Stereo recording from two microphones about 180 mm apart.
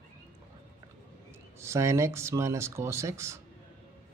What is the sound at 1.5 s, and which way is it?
A man's voice, 15° right (ahead or behind).